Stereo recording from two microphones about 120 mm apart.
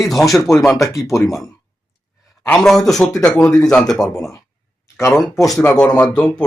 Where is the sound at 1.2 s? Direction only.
Centre (ahead or behind).